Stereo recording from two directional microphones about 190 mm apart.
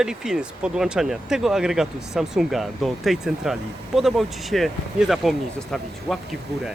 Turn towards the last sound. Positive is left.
turn(degrees=5)  # may be behind; listen again after turning